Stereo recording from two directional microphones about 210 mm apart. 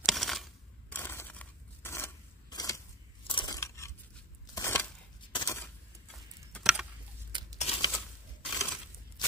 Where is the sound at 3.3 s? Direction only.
20° left (ahead or behind).